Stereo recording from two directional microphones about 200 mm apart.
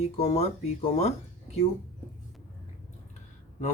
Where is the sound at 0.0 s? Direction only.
30° left (ahead or behind).